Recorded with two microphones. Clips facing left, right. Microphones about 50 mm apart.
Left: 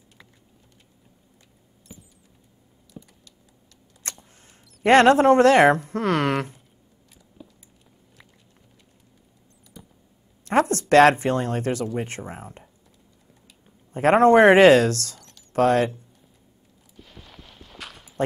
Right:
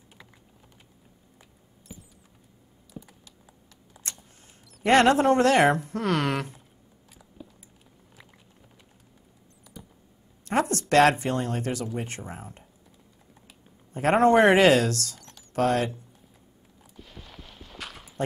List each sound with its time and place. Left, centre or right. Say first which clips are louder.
1.9 s rodents: even; centre
2.9 s computer keyboard: right 1 dB; centre
4.8 s speech: left 4 dB; left
7.4 s a sound: even; centre
9.8 s a sound: even; centre
10.4 s speech: left 5 dB; left
13.9 s speech: left 4 dB; left
16.9 s clip-clop: even; centre